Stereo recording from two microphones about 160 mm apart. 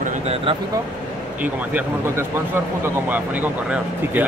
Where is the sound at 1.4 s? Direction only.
10° right (ahead or behind).